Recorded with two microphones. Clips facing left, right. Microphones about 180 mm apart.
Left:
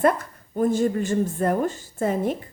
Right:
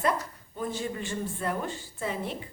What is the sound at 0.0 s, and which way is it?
A woman's voice, 50° left (ahead or behind).